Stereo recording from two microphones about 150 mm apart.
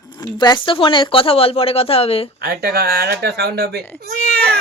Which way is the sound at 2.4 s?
90° right.